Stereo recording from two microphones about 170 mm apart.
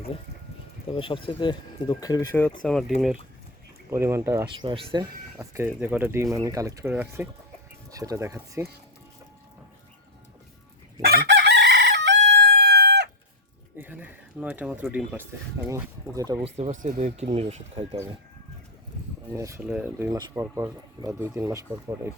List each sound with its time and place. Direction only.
0.9 s speech: 30° left (ahead or behind)
2.6 s speech: 5° left (ahead or behind)
3.8 s speech: 15° right (ahead or behind)
4.6 s speech: 30° right (ahead or behind)
5.4 s speech: 15° right (ahead or behind)
11.0 s chicken: 65° right (ahead or behind)
13.7 s a sound: 10° right (ahead or behind)
15.7 s speech: 20° right (ahead or behind)
16.4 s speech: 35° right (ahead or behind)
19.3 s speech: 15° right (ahead or behind)